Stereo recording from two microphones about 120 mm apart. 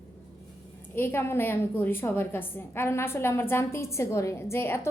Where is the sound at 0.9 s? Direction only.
20° left (ahead or behind).